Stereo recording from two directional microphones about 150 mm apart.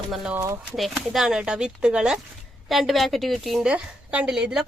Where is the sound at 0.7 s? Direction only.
Centre (ahead or behind).